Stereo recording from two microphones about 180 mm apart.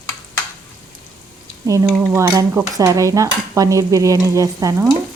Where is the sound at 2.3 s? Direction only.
15° right (ahead or behind).